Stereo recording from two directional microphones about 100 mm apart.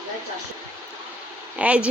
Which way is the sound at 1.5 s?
15° right (ahead or behind).